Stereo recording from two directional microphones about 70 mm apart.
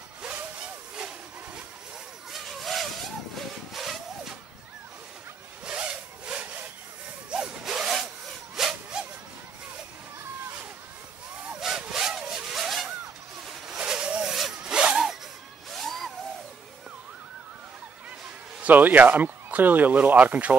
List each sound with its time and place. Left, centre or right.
0.2 s a sound: centre
2.3 s vehicle: centre
5.7 s sawing: centre
11.6 s vehicle: centre
13.7 s vehicle: centre
14.3 s zipper: centre
15.7 s a sound: centre
18.6 s speech: right